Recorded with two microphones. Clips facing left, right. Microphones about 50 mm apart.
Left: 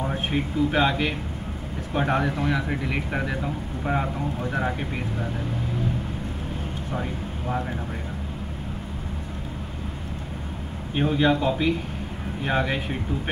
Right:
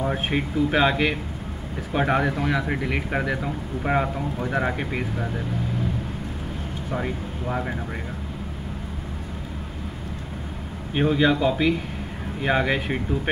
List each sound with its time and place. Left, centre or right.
0.3 s speech: right
2.0 s speech: centre
4.5 s a man's voice: centre
11.0 s a man's voice: centre